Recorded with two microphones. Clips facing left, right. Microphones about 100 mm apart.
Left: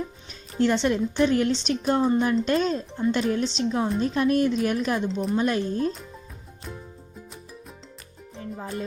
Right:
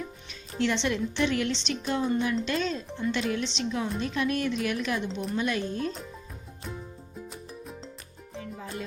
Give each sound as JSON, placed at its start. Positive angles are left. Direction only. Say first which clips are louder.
{"t": 0.6, "sound": "a woman's voice", "louder": "left 5 dB", "side_deg": 40}
{"t": 8.4, "sound": "music", "louder": "left 4 dB", "side_deg": 40}